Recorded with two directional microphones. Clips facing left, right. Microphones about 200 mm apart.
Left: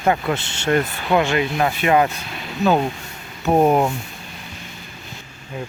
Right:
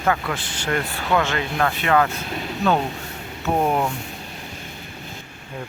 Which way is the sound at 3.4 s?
25° left (ahead or behind).